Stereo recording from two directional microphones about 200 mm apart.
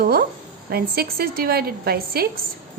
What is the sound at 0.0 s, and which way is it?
A woman's voice, 50° right (ahead or behind).